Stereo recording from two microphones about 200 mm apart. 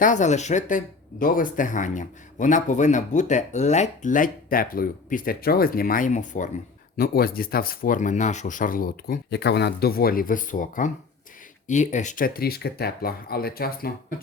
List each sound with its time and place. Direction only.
0.0 s speech: 40° left (ahead or behind)